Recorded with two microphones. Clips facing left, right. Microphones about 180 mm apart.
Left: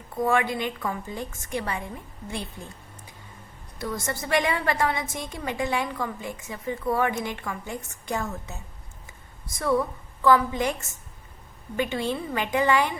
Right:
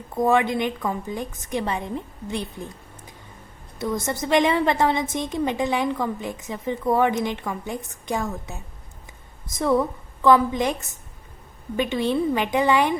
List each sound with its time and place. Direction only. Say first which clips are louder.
0.2 s a woman's voice: right 4 dB; 20° right (ahead or behind)
3.8 s a woman's voice: right 5 dB; 20° right (ahead or behind)